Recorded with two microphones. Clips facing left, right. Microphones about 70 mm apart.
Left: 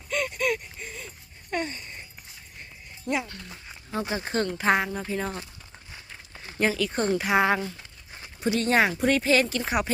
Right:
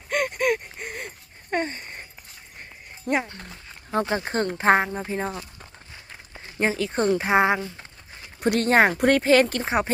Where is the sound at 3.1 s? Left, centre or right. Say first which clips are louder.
Right 4 dB; right.